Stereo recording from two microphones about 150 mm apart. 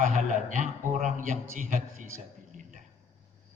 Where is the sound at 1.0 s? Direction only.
60° right (ahead or behind).